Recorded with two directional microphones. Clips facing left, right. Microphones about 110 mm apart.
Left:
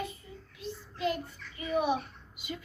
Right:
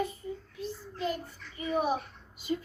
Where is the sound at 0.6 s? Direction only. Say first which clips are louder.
Left 2 dB; 35° right (ahead or behind).